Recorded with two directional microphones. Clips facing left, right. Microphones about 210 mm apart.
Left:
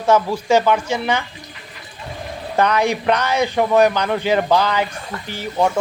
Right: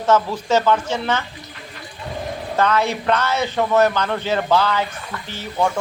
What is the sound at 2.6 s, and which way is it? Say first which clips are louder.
Speech: left 2 dB; 15° left (ahead or behind).